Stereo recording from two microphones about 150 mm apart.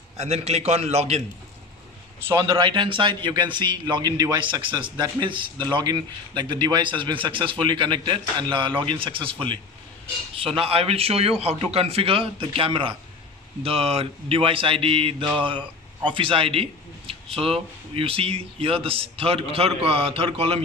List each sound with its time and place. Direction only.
0.2 s a man's voice: 45° right (ahead or behind)
2.4 s a man's voice: 35° right (ahead or behind)